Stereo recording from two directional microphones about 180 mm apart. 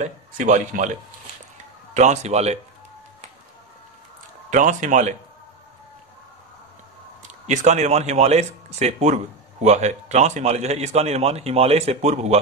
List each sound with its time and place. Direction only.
0.0 s speech: 45° right (ahead or behind)
2.0 s speech: 40° right (ahead or behind)
4.5 s speech: 45° right (ahead or behind)
7.4 s speech: 40° right (ahead or behind)